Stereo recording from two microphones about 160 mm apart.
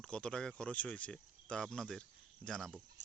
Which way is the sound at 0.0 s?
5° left (ahead or behind).